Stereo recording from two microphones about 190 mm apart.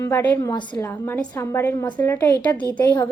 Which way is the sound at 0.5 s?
25° left (ahead or behind).